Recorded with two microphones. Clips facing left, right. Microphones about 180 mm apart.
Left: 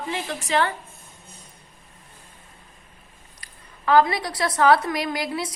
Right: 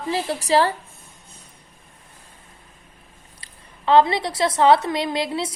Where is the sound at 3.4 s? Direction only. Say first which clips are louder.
Right 2 dB; 25° right (ahead or behind).